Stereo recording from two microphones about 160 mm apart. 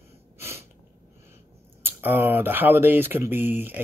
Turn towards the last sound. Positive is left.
turn(degrees=-15)  # may be behind; listen again after turning